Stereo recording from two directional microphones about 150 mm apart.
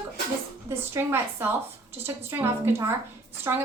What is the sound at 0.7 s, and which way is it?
A woman's voice, 15° right (ahead or behind).